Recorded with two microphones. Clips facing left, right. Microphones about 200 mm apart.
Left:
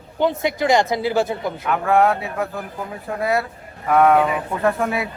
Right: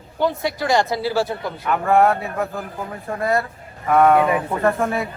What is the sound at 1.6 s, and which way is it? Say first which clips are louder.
A man's voice: right 1 dB; centre (ahead or behind).